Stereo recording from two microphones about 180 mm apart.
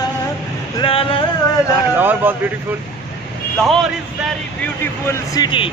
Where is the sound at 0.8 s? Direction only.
30° left (ahead or behind).